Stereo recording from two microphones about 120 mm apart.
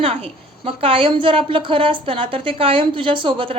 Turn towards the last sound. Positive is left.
turn(degrees=-45)  # may be behind; listen again after turning